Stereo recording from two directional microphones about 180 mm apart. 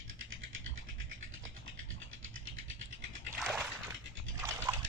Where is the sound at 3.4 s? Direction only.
Centre (ahead or behind).